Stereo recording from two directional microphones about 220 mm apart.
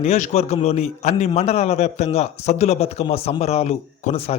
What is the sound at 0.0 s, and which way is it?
A man's voice, 30° left (ahead or behind).